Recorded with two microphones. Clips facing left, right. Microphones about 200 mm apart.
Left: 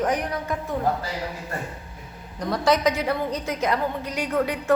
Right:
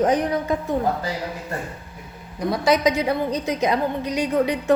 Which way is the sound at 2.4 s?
10° right (ahead or behind).